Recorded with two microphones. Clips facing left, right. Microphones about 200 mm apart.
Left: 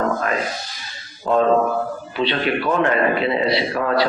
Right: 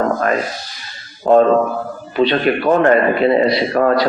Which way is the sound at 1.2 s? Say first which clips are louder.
Right 5 dB; 50° right (ahead or behind).